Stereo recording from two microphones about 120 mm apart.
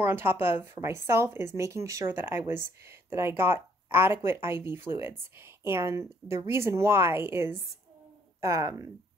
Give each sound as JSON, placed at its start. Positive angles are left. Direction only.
{"t": 0.0, "sound": "speech", "side_deg": -20}